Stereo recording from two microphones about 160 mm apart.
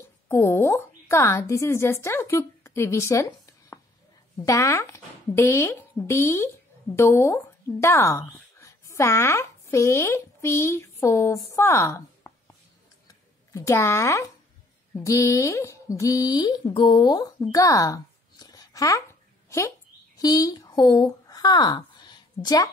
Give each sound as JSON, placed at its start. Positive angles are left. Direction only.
{"t": 0.3, "sound": "a woman's voice", "side_deg": 15}
{"t": 4.5, "sound": "speech", "side_deg": 15}
{"t": 13.5, "sound": "speech", "side_deg": 20}
{"t": 20.2, "sound": "a woman's voice", "side_deg": 25}